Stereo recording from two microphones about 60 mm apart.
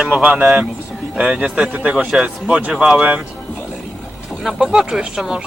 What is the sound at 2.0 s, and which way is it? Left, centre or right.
Speech, centre.